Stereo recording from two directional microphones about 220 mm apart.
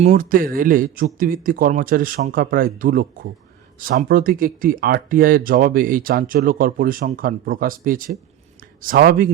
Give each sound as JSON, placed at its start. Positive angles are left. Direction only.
{"t": 0.0, "sound": "speech", "side_deg": -40}